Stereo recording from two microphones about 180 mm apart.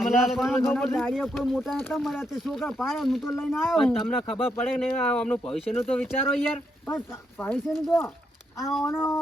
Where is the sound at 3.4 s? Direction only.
10° left (ahead or behind).